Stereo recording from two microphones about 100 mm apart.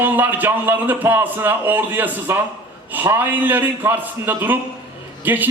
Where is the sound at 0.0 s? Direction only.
20° right (ahead or behind).